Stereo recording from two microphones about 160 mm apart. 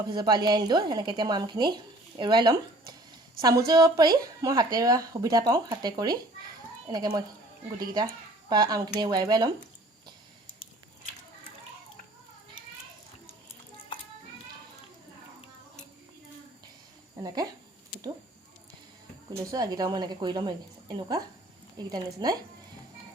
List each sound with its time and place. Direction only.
0.1 s speech: 25° right (ahead or behind)
3.7 s speech: 25° right (ahead or behind)
19.4 s speech: 20° right (ahead or behind)